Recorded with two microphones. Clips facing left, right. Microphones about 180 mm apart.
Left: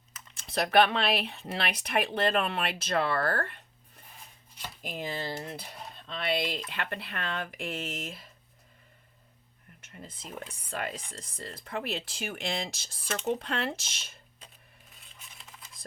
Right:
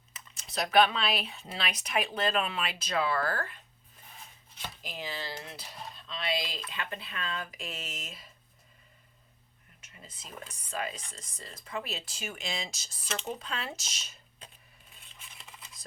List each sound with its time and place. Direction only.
0.3 s speech: 55° left (ahead or behind)
4.8 s speech: 50° left (ahead or behind)
9.9 s speech: 55° left (ahead or behind)